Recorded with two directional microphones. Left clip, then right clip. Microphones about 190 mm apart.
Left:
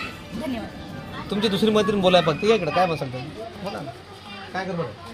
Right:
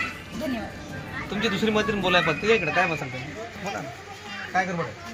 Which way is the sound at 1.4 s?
60° left (ahead or behind).